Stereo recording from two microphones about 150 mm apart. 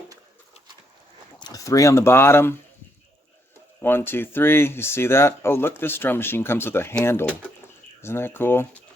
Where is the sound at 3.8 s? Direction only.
15° left (ahead or behind).